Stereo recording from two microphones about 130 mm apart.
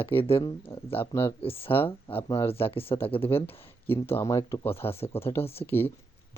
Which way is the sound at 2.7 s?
45° left (ahead or behind).